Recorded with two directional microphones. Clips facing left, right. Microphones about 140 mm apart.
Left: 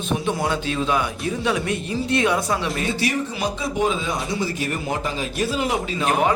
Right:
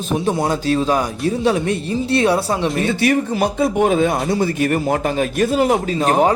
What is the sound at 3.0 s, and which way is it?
Speech, 55° right (ahead or behind).